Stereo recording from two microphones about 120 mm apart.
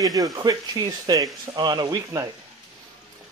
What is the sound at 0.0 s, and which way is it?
Speech, 30° right (ahead or behind).